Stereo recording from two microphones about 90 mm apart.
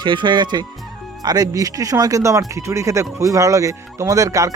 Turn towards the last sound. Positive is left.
turn(degrees=-35)  # may be behind; listen again after turning